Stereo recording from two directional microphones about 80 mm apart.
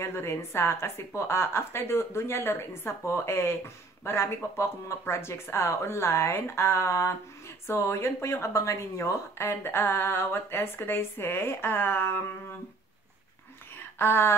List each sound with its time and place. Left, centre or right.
0.0 s a woman's voice: left
13.9 s a woman's voice: left